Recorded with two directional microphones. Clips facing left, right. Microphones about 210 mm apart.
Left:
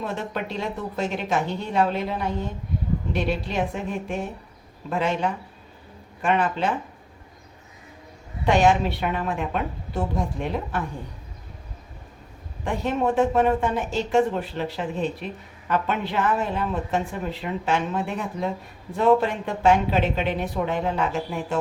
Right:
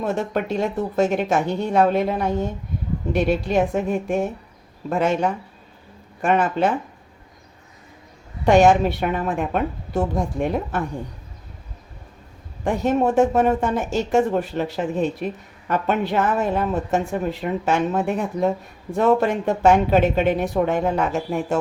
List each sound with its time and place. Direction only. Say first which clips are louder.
0.0 s speech: right 6 dB; 45° right (ahead or behind)
8.4 s speech: right 5 dB; 45° right (ahead or behind)
12.6 s speech: right 4 dB; 45° right (ahead or behind)